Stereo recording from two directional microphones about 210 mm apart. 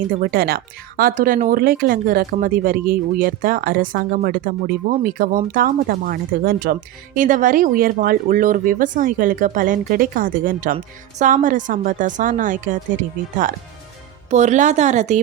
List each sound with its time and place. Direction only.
0.1 s speech: 45° right (ahead or behind)